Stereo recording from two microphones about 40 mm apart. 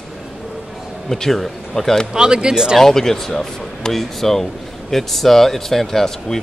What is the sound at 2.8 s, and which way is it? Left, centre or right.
Speech, centre.